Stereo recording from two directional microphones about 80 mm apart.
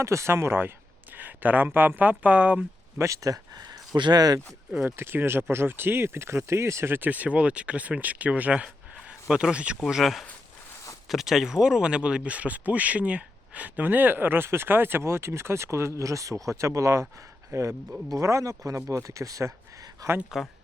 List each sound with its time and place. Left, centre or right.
0.0 s speech: right; by 2.6 s centre
3.0 s speech: right
4.7 s speech: centre
4.9 s speech: right; by 9.7 s centre
9.9 s speech: centre; by 20.1 s right
20.3 s speech: centre